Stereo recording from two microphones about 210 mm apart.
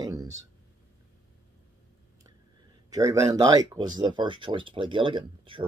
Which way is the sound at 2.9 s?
15° right (ahead or behind).